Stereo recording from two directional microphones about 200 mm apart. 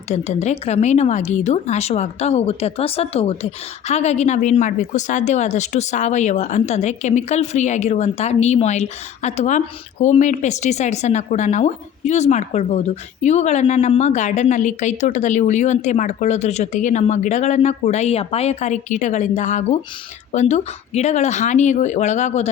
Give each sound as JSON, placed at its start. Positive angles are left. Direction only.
{"t": 0.1, "sound": "a woman's voice", "side_deg": 35}